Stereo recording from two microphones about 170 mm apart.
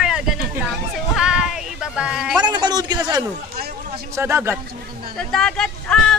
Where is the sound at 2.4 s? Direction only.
25° right (ahead or behind).